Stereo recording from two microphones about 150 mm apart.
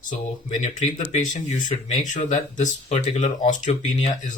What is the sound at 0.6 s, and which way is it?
Speech, 55° left (ahead or behind).